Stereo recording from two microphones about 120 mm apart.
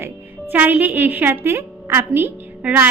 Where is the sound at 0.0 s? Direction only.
15° right (ahead or behind).